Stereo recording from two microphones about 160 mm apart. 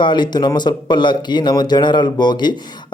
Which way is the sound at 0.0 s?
30° left (ahead or behind).